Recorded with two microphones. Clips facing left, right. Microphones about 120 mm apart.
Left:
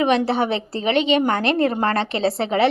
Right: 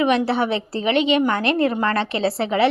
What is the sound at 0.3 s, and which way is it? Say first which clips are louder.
A woman's voice: even; 25° left (ahead or behind).